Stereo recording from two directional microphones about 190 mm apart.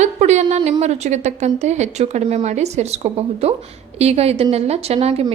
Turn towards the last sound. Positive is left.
turn(degrees=-30)  # may be behind; listen again after turning